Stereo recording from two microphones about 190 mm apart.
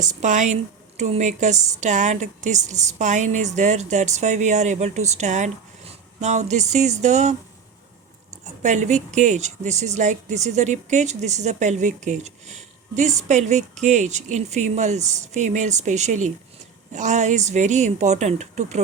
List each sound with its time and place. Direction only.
0.0 s speech: 40° right (ahead or behind)
8.6 s speech: 40° right (ahead or behind)